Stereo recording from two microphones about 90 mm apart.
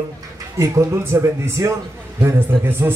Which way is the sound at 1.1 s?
30° right (ahead or behind).